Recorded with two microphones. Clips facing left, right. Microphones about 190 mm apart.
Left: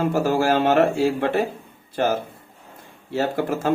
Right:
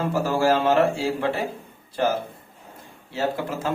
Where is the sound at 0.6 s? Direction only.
55° left (ahead or behind).